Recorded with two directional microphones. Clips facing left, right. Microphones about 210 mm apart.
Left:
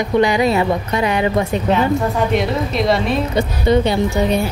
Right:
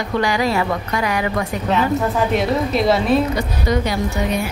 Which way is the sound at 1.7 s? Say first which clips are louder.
Even; centre (ahead or behind).